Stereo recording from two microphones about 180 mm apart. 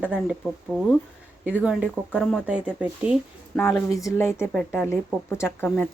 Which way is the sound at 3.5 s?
10° left (ahead or behind).